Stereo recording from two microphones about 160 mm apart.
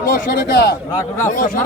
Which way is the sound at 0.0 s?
60° left (ahead or behind).